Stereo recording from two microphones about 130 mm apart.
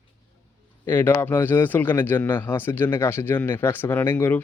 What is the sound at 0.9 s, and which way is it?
Speech, 15° left (ahead or behind).